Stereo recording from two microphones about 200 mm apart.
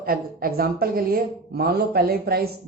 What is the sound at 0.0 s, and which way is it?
Speech, 45° right (ahead or behind).